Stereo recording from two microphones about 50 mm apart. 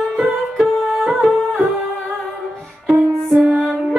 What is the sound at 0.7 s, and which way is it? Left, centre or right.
Music, centre.